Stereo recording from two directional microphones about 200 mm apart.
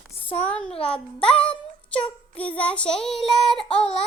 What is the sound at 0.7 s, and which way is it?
Speech, 30° left (ahead or behind).